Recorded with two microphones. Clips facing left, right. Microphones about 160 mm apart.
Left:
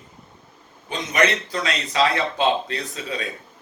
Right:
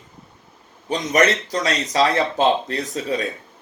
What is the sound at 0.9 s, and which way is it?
Speech, 40° right (ahead or behind).